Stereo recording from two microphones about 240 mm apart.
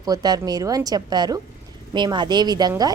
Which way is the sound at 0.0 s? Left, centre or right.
Centre.